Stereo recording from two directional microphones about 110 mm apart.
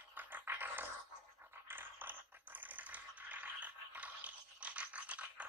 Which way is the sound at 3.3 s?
15° right (ahead or behind).